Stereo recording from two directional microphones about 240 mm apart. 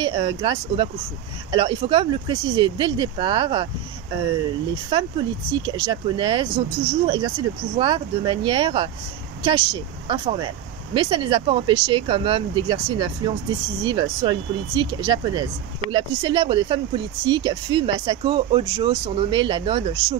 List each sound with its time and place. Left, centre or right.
0.0 s speech: centre
4.9 s speech: right